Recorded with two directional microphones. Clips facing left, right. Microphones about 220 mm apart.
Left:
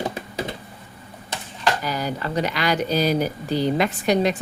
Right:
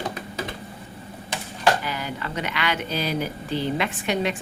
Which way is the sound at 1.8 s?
40° left (ahead or behind).